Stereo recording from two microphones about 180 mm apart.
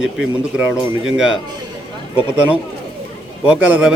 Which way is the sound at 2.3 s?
5° right (ahead or behind).